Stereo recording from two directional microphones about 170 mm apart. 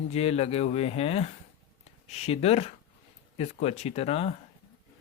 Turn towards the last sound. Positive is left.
turn(degrees=35)  # may be behind; listen again after turning